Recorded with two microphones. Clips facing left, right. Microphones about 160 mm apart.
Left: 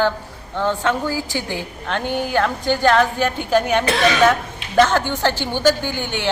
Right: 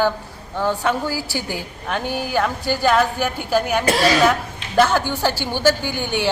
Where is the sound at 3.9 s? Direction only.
35° right (ahead or behind).